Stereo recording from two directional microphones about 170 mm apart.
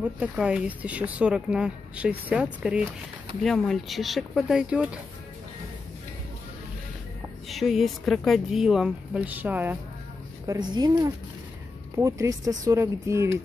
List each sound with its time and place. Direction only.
0.0 s speech: 5° right (ahead or behind)
7.4 s speech: centre (ahead or behind)
10.4 s a woman's voice: 25° right (ahead or behind)